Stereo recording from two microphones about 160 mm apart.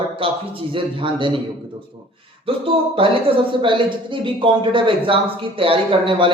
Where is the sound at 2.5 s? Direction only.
35° right (ahead or behind).